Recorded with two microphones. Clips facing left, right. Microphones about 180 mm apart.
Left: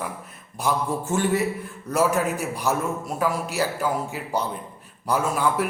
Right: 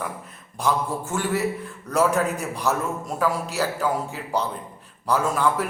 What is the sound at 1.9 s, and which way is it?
A man's voice, 5° left (ahead or behind).